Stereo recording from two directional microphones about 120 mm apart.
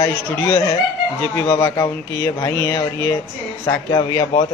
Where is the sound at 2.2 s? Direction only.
25° left (ahead or behind).